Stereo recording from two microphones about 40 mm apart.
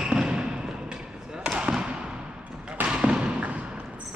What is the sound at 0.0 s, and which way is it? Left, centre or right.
Basketball bounce, centre.